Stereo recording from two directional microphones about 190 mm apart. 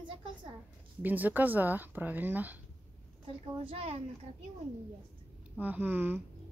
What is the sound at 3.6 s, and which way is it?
Speech, 30° right (ahead or behind).